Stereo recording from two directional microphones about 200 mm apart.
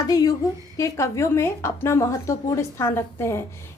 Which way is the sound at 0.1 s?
20° left (ahead or behind).